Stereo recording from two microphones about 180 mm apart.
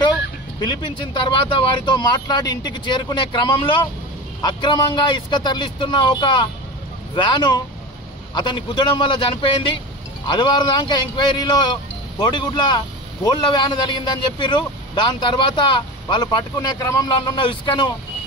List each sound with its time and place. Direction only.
0.6 s speech: 25° left (ahead or behind)